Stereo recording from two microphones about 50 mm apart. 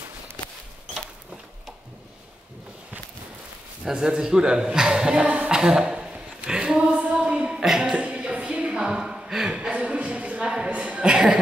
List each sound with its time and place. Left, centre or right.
3.8 s a man's voice: centre
5.5 s a sound: centre
7.6 s a man's voice: centre
8.0 s speech: right